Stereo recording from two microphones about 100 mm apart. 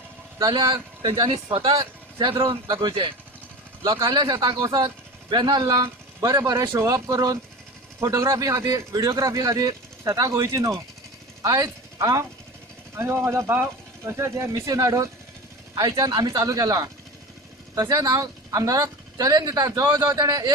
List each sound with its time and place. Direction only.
0.5 s speech: 40° right (ahead or behind)
2.7 s speech: 50° right (ahead or behind)
3.8 s speech: 40° right (ahead or behind)
6.7 s speech: 35° right (ahead or behind)